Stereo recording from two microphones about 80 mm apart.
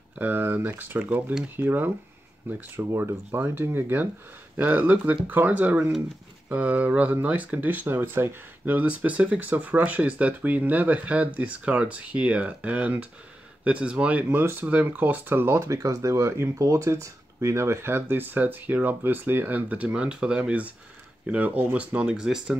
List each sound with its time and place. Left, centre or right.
0.1 s speech: right
15.5 s speech: right; by 22.6 s centre